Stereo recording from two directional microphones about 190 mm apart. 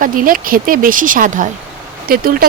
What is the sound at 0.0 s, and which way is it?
Speech, 45° right (ahead or behind).